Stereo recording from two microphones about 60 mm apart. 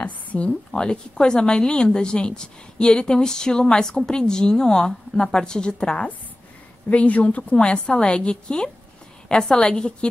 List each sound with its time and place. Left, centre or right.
0.0 s a sound: left
0.7 s a woman's voice: centre
6.9 s a woman's voice: left